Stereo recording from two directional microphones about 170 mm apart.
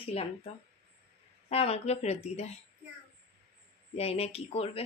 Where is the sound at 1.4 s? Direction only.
35° left (ahead or behind).